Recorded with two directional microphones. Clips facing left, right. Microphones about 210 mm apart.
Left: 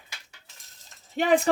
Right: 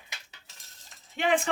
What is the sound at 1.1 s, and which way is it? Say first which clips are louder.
Speech: left 4 dB; 40° left (ahead or behind).